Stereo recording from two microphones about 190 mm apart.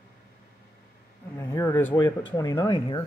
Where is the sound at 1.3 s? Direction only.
15° left (ahead or behind).